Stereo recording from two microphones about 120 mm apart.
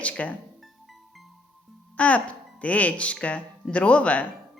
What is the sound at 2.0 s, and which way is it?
Speech, 10° left (ahead or behind).